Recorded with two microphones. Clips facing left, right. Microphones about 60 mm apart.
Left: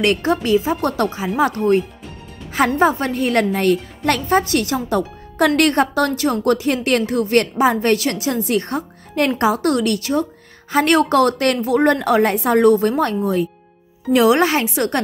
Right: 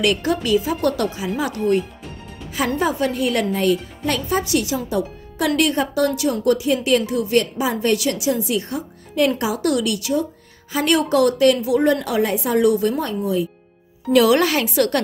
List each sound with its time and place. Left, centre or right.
0.0 s a woman's voice: left
2.5 s a woman's voice: left
13.0 s a woman's voice: left
14.1 s a woman's voice: left